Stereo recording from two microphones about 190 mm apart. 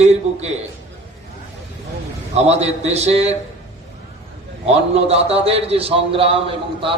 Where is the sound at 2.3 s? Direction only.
35° right (ahead or behind).